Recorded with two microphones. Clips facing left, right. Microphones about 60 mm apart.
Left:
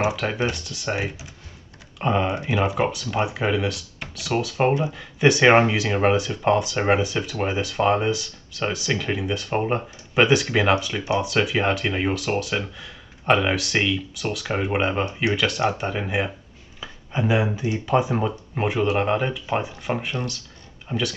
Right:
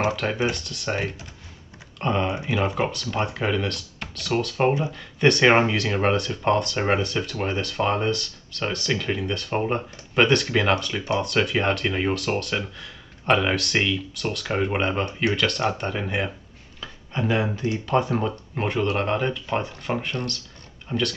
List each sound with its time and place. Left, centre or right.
0.0 s speech: centre
2.2 s speech: centre
2.5 s speech: centre